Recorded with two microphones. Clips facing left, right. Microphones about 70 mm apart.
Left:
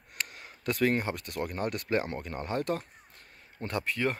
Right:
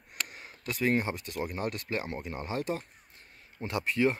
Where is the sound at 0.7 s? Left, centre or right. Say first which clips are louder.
Even; centre.